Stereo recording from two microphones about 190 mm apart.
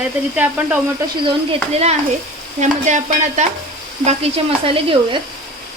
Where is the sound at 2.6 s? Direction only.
40° right (ahead or behind).